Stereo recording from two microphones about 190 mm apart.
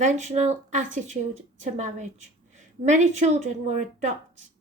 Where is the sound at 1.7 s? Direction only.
40° right (ahead or behind).